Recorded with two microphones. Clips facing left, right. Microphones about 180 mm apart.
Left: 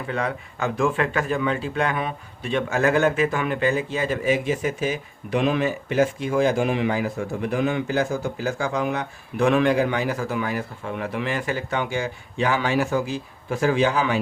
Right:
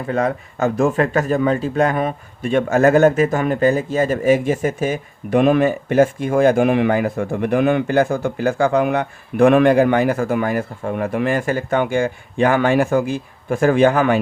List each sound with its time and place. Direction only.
0.1 s speech: 45° right (ahead or behind)